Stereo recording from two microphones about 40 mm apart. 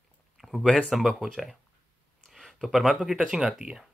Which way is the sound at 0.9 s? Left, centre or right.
Centre.